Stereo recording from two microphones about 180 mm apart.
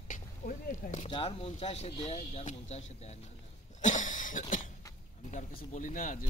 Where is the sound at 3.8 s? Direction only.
45° left (ahead or behind).